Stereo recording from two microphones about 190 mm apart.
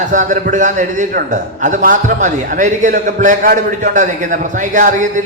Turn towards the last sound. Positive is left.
turn(degrees=-40)  # may be behind; listen again after turning